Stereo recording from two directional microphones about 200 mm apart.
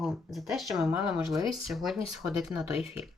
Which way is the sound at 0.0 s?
Centre (ahead or behind).